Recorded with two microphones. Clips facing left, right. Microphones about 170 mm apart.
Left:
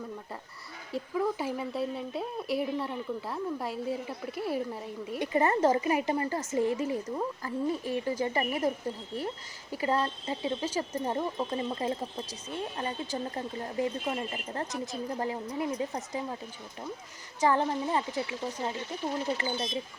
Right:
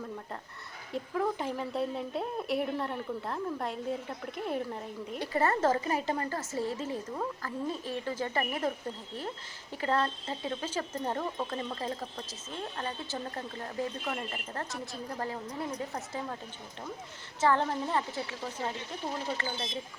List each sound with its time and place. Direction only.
0.9 s a woman's voice: 5° left (ahead or behind)
5.2 s speech: 20° left (ahead or behind)
9.7 s speech: 10° left (ahead or behind)
17.4 s speech: 15° left (ahead or behind)